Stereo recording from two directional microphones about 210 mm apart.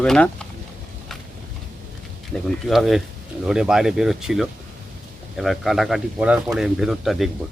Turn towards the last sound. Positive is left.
turn(degrees=0)  # may be behind; listen again after turning